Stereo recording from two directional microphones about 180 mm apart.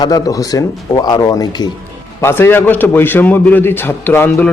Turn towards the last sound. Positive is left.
turn(degrees=10)  # may be behind; listen again after turning